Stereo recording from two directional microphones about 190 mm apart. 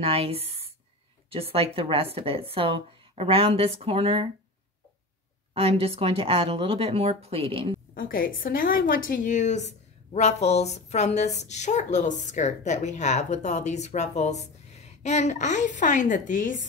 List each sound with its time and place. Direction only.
0.0 s a woman's voice: 30° right (ahead or behind)
5.5 s speech: 30° right (ahead or behind)
7.9 s a woman's voice: 50° left (ahead or behind)